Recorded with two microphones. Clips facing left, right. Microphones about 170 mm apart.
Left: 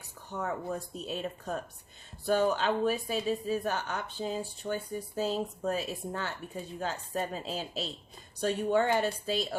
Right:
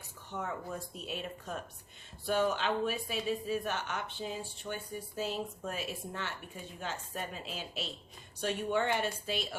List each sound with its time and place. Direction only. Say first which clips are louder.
0.3 s speech: left 4 dB; 40° left (ahead or behind)